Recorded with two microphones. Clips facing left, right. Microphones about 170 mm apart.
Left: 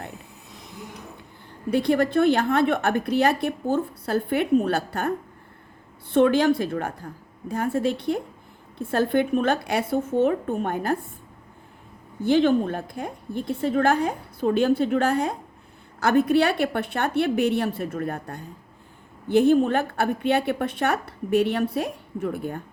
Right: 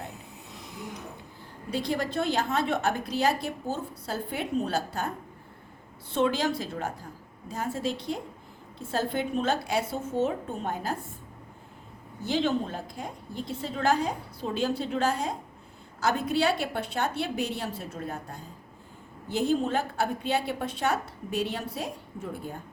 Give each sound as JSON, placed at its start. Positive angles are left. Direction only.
{"t": 1.7, "sound": "a woman's voice", "side_deg": 60}
{"t": 12.2, "sound": "a woman's voice", "side_deg": 55}